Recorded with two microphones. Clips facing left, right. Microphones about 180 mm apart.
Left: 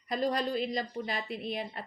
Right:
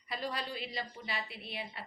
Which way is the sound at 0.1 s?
45° left (ahead or behind).